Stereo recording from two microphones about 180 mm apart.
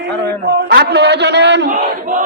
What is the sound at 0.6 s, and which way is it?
A man's voice, 65° right (ahead or behind).